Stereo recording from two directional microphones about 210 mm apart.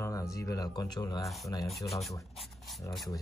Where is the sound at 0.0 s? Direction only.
15° left (ahead or behind).